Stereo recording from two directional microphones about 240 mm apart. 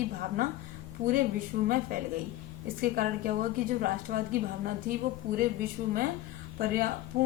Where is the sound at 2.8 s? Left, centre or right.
Right.